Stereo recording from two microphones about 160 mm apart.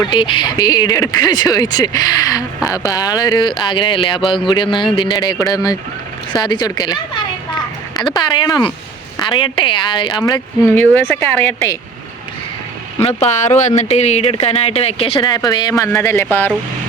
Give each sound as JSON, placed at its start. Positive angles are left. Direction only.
{"t": 0.0, "sound": "speech", "side_deg": 30}
{"t": 10.7, "sound": "speech", "side_deg": 10}
{"t": 13.1, "sound": "speech", "side_deg": 45}
{"t": 15.2, "sound": "speech", "side_deg": 25}